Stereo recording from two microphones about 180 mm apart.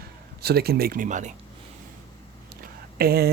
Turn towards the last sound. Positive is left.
turn(degrees=-60)  # may be behind; listen again after turning